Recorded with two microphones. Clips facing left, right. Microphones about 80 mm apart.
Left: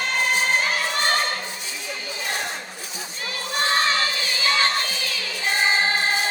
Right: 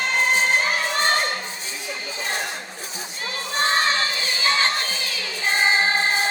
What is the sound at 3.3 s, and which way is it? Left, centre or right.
Music, right.